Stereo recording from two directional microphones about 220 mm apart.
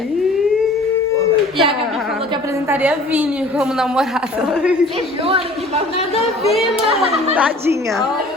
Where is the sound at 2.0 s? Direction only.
Centre (ahead or behind).